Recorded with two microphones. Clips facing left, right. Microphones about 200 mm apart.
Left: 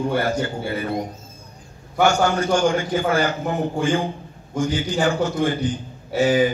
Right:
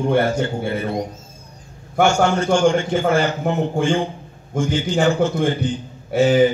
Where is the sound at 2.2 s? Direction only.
25° right (ahead or behind).